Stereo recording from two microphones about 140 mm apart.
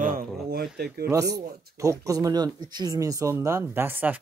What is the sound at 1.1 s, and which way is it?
Speech, 20° right (ahead or behind).